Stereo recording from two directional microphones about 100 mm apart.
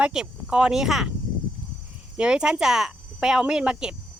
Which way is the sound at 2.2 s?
10° right (ahead or behind).